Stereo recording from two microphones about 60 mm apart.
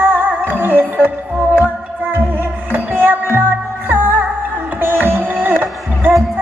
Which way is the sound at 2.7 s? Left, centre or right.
Right.